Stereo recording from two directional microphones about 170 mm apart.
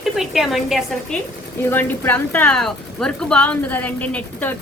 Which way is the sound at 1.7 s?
10° left (ahead or behind).